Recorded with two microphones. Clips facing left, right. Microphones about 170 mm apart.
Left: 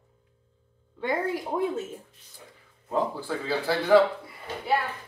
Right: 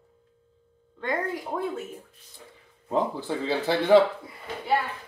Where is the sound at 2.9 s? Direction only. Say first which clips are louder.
Right 1 dB; 20° right (ahead or behind).